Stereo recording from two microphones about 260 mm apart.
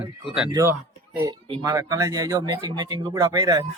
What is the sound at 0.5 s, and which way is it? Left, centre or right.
Speech, centre.